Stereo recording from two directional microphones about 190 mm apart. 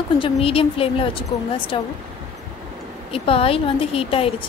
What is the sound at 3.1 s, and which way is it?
A woman's voice, 30° left (ahead or behind).